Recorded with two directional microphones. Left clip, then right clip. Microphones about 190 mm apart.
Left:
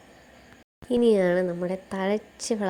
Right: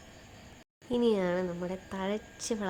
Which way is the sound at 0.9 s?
25° left (ahead or behind).